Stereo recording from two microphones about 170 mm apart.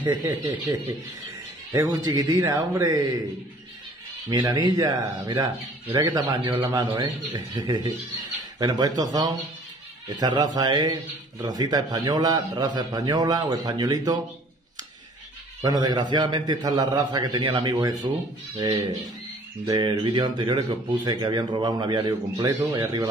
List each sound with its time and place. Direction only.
0.0 s speech: 25° right (ahead or behind)
1.7 s speech: 25° right (ahead or behind)
4.3 s speech: 25° right (ahead or behind)
15.6 s speech: 25° right (ahead or behind)